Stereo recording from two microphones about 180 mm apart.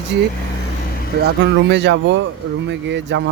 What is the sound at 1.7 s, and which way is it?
Speech, 75° right (ahead or behind).